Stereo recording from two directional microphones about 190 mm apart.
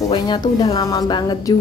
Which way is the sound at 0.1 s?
20° left (ahead or behind).